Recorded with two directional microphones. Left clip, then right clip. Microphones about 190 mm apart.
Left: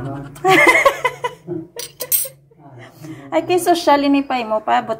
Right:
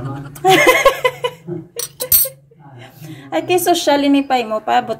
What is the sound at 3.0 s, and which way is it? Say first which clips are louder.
A woman's voice: even; 20° right (ahead or behind).